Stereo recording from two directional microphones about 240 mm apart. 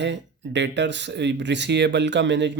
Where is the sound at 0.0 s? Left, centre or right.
Right.